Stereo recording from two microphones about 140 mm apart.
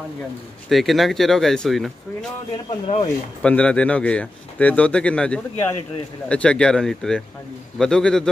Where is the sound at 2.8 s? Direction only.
45° left (ahead or behind).